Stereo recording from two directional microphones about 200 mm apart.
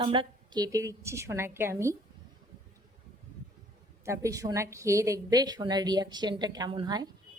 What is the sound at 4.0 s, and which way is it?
A woman's voice, 15° right (ahead or behind).